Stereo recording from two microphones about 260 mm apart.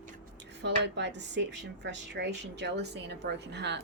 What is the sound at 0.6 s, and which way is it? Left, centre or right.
Speech, right.